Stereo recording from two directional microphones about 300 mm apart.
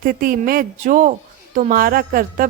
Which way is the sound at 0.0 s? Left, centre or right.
Right.